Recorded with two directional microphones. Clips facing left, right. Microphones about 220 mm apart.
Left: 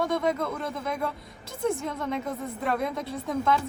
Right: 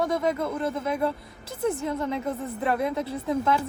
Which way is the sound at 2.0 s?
25° right (ahead or behind).